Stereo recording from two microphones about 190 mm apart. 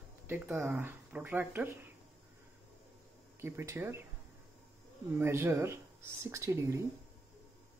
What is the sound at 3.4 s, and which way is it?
Speech, 15° right (ahead or behind).